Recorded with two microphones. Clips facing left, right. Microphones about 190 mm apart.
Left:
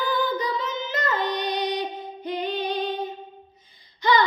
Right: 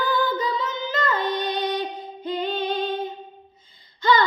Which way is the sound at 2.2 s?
15° left (ahead or behind).